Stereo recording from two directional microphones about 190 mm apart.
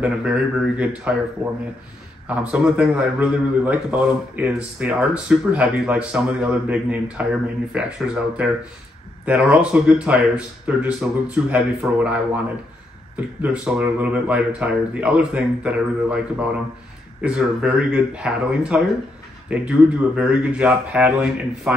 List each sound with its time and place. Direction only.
0.0 s a man's voice: 5° right (ahead or behind)